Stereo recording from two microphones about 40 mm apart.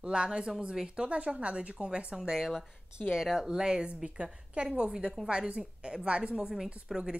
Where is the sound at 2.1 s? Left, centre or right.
Centre.